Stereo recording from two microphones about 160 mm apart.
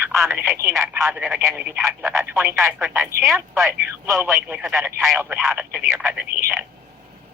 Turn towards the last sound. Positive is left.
turn(degrees=-10)  # may be behind; listen again after turning